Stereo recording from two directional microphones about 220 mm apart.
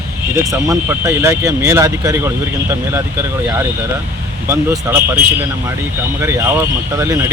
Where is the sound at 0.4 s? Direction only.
15° right (ahead or behind).